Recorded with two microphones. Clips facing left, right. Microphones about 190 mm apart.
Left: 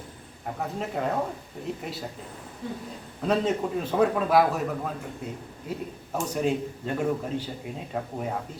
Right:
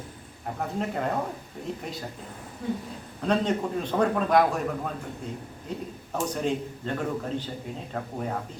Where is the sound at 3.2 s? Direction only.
5° left (ahead or behind).